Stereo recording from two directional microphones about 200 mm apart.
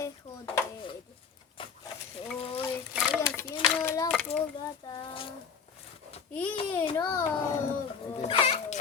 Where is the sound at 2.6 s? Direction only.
10° left (ahead or behind).